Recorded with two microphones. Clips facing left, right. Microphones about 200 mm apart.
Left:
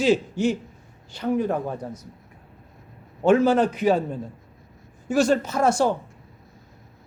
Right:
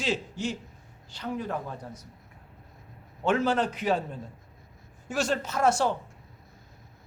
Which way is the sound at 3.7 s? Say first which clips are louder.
Left 7 dB; 5° left (ahead or behind).